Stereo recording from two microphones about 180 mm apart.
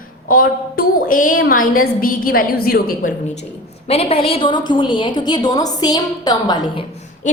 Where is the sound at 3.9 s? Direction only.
35° left (ahead or behind).